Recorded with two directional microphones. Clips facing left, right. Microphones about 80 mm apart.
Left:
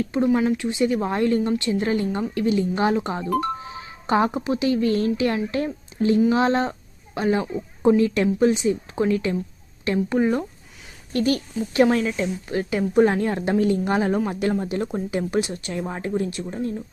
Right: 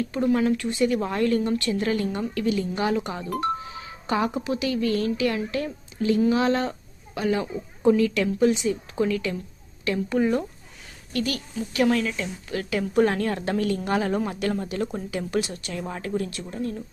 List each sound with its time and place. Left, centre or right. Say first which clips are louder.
0.3 s speech: right 1 dB; centre